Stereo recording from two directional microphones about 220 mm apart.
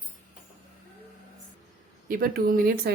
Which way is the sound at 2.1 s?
40° right (ahead or behind).